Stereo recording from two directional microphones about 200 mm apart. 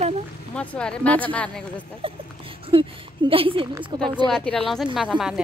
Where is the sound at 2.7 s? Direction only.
25° right (ahead or behind).